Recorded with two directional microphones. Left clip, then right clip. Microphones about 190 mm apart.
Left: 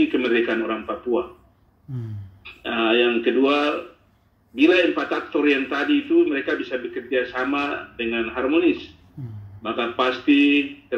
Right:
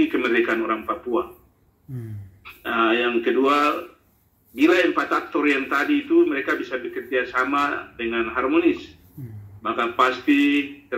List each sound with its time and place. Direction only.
0.1 s a man's voice: 20° left (ahead or behind)
2.6 s a man's voice: 20° left (ahead or behind)